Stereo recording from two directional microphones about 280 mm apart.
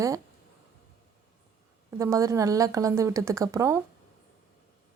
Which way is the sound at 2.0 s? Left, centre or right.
Centre.